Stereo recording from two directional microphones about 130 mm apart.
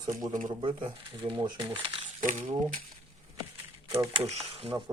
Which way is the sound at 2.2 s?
90° right.